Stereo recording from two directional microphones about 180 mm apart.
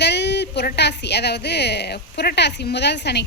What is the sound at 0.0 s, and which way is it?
A woman's voice, 70° left (ahead or behind).